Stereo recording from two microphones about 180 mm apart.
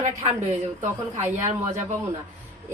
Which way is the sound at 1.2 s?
40° right (ahead or behind).